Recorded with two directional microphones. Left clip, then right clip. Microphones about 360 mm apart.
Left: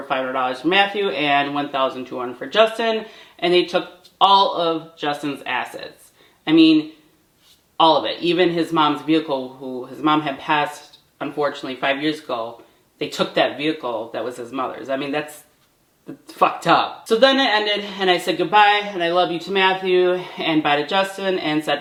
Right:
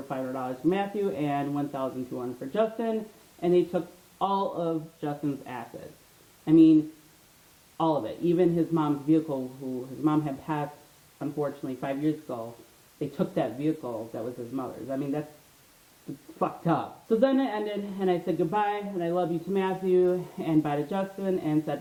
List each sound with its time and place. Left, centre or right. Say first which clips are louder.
0.0 s speech: left 12 dB; centre
8.0 s speech: left 7 dB; centre
9.2 s speech: left 8 dB; centre
13.8 s speech: left 9 dB; centre
16.4 s speech: left 12 dB; centre